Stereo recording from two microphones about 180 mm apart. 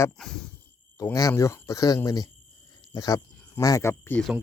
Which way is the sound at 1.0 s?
15° left (ahead or behind).